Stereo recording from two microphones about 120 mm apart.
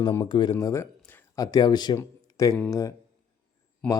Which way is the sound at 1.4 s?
30° left (ahead or behind).